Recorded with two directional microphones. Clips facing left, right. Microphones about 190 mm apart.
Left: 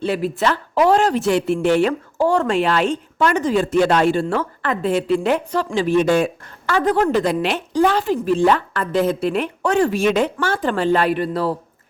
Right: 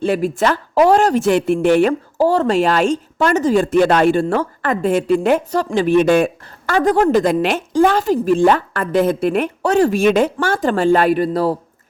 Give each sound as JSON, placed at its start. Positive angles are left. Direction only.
{"t": 0.0, "sound": "speech", "side_deg": -45}
{"t": 2.1, "sound": "speech", "side_deg": -35}
{"t": 6.7, "sound": "speech", "side_deg": -45}